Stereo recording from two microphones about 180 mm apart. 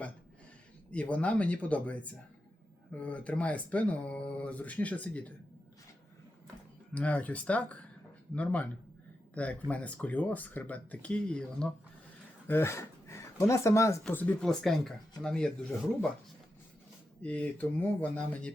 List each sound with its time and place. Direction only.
0.9 s speech: 5° left (ahead or behind)
6.9 s speech: 10° left (ahead or behind)
17.2 s speech: 5° left (ahead or behind)